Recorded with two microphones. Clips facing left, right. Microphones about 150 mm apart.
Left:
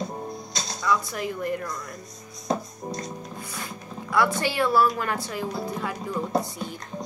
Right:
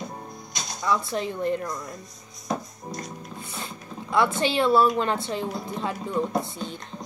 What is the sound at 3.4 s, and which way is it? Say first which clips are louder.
Speech: left 1 dB; 25° right (ahead or behind).